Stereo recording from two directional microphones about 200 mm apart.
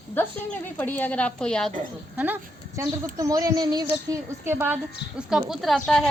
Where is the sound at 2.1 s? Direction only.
10° right (ahead or behind).